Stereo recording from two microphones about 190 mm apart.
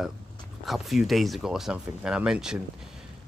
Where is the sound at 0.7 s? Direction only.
Centre (ahead or behind).